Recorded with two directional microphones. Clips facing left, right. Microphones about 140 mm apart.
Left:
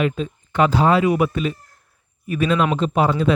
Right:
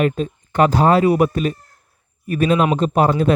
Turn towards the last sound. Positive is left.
turn(degrees=-50)  # may be behind; listen again after turning